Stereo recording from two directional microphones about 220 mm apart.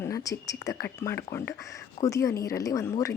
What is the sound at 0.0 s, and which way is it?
A woman's voice, 15° left (ahead or behind).